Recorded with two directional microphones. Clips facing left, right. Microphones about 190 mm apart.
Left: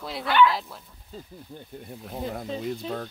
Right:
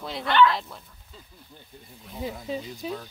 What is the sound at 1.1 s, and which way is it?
Speech, 40° left (ahead or behind).